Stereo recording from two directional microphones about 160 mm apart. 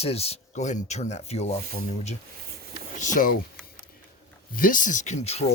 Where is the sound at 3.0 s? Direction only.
55° left (ahead or behind).